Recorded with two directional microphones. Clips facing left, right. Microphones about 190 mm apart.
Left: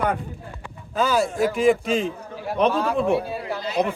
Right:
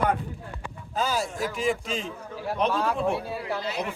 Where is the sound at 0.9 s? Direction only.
65° left (ahead or behind).